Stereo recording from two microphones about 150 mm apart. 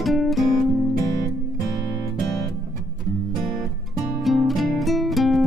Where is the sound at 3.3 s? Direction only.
Centre (ahead or behind).